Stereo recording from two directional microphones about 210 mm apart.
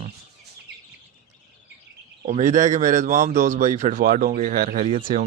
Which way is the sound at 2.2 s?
35° right (ahead or behind).